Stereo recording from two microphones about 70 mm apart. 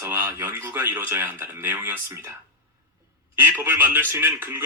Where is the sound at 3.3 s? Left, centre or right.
Right.